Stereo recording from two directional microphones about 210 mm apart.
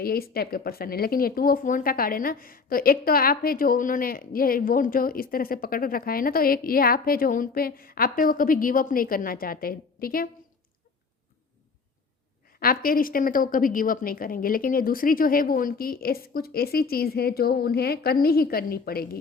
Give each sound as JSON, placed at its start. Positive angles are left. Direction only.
{"t": 0.0, "sound": "speech", "side_deg": 45}
{"t": 12.5, "sound": "speech", "side_deg": 45}